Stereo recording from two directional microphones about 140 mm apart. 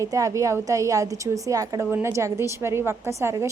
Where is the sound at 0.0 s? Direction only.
25° right (ahead or behind).